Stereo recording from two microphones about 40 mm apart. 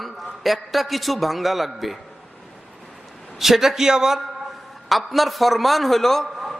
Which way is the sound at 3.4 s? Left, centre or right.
Centre.